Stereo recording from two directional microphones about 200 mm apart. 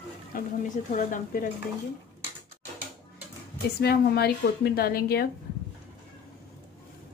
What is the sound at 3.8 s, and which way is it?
A woman's voice, 55° left (ahead or behind).